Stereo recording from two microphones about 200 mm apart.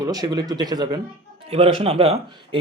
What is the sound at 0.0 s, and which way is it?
A man's voice, 20° right (ahead or behind).